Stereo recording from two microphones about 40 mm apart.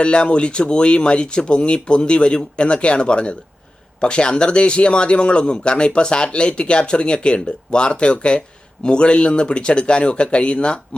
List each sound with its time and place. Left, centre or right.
0.0 s speech: left